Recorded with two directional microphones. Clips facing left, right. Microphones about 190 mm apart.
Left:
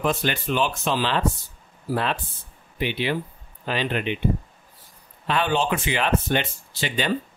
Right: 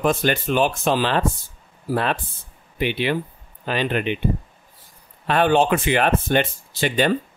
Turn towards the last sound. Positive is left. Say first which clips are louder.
# right 6 dB
turn(degrees=-50)  # may be behind; listen again after turning